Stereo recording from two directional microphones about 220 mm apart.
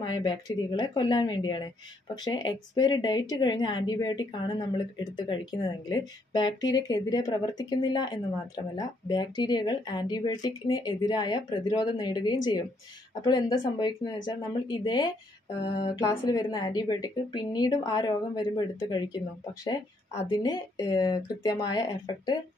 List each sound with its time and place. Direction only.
0.0 s a woman's voice: 20° left (ahead or behind)
20.2 s speech: 20° left (ahead or behind)